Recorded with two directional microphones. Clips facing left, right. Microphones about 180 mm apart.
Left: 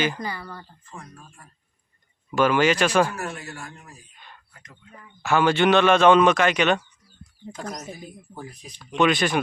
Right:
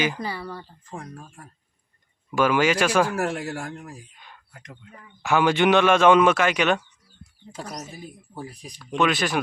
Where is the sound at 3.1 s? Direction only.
90° right.